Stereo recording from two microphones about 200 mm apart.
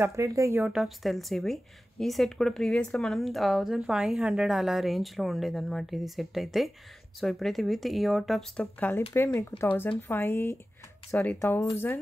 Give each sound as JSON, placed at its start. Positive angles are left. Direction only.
{"t": 0.0, "sound": "a woman's voice", "side_deg": -15}